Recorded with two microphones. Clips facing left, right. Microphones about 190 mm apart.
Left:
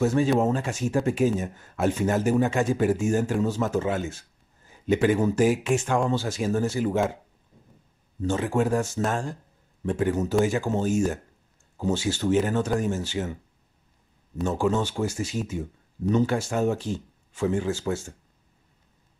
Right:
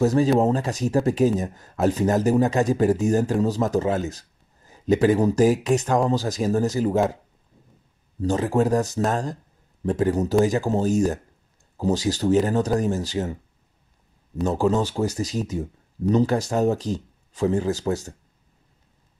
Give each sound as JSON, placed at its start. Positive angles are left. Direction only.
{"t": 0.0, "sound": "speech", "side_deg": -35}
{"t": 8.2, "sound": "speech", "side_deg": -35}